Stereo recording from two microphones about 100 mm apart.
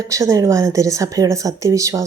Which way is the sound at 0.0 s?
30° right (ahead or behind).